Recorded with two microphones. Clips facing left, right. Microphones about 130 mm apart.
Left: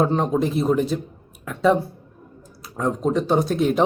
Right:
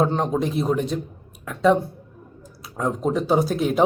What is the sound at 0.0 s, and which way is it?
Speech, centre (ahead or behind).